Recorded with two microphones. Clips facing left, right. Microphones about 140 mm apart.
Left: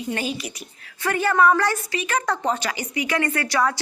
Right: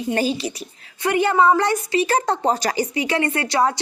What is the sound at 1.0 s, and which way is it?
A woman's voice, 20° right (ahead or behind).